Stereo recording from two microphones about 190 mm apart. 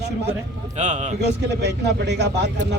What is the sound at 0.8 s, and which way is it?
Speech, 40° right (ahead or behind).